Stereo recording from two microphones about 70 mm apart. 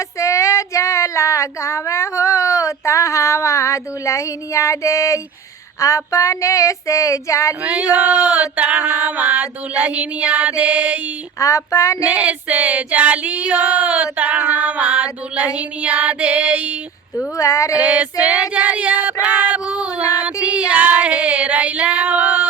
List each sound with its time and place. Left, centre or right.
0.2 s child singing: left
5.8 s female singing: left
7.6 s female singing: centre
11.3 s female singing: left
12.0 s female singing: centre
17.3 s female singing: left
17.7 s female singing: centre
20.2 s child singing: centre
20.7 s female singing: right